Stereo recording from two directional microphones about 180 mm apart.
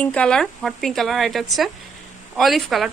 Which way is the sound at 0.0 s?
5° left (ahead or behind).